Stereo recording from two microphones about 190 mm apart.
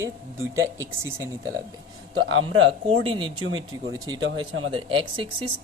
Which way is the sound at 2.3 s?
80° right.